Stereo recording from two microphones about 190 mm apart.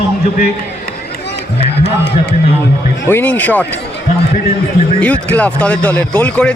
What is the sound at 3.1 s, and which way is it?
Speech, 10° left (ahead or behind).